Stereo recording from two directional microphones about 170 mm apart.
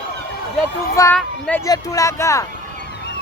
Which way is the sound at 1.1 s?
10° left (ahead or behind).